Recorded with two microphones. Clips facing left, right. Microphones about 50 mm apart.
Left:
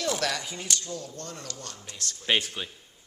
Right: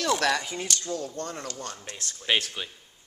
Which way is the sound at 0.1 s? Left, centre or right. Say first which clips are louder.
Right 8 dB; right.